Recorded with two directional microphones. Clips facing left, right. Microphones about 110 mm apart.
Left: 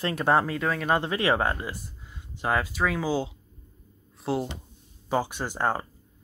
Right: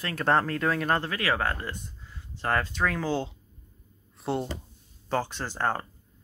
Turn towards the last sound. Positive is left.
turn(degrees=15)  # may be behind; listen again after turning